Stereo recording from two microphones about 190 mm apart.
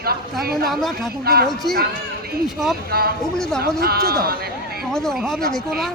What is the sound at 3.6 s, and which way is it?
Speech, 55° right (ahead or behind).